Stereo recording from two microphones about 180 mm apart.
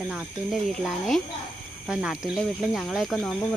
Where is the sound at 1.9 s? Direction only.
5° right (ahead or behind).